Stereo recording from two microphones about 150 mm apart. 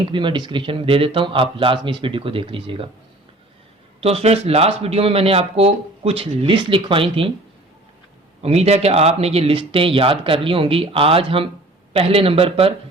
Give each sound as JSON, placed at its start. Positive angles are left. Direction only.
{"t": 0.1, "sound": "speech", "side_deg": -35}
{"t": 4.0, "sound": "speech", "side_deg": -45}
{"t": 8.4, "sound": "speech", "side_deg": -45}